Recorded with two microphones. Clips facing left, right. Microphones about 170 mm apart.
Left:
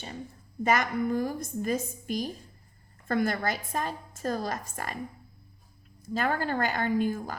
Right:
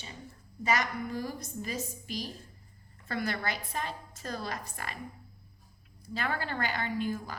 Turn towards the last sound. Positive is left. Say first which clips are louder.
# left 6 dB
turn(degrees=45)  # may be behind; listen again after turning